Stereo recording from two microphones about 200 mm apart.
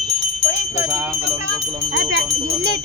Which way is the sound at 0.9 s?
Centre (ahead or behind).